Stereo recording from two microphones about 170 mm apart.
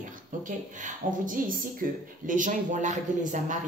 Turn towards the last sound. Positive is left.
turn(degrees=-45)  # may be behind; listen again after turning